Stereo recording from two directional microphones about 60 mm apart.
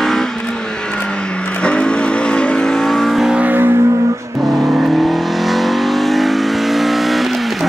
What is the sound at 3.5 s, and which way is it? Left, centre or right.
Car, right.